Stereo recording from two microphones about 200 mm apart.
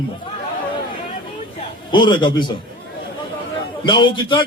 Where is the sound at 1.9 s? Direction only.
25° left (ahead or behind).